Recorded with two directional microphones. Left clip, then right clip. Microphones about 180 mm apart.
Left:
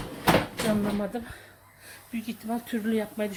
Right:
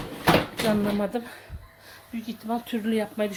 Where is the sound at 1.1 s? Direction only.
15° right (ahead or behind).